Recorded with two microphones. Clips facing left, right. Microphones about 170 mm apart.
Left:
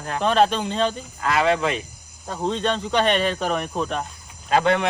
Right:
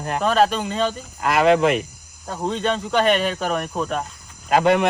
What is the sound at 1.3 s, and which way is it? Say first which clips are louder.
Speech: right 5 dB; 55° right (ahead or behind).